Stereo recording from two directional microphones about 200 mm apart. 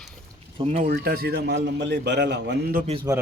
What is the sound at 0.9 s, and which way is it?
A man's voice, 50° right (ahead or behind).